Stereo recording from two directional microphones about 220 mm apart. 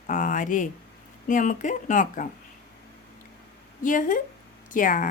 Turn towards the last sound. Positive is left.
turn(degrees=35)  # may be behind; listen again after turning